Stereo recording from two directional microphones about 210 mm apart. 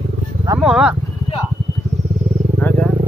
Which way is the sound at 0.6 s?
Centre (ahead or behind).